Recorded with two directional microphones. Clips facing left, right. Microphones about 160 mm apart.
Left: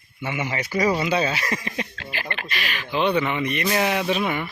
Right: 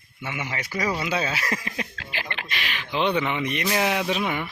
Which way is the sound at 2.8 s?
10° left (ahead or behind).